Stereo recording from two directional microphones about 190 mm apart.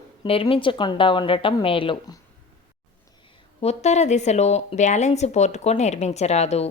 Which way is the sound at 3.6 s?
35° left (ahead or behind).